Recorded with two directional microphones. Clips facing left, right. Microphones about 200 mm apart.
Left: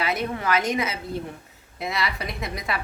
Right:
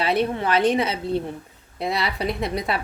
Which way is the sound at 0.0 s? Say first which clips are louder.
Right 4 dB; 30° right (ahead or behind).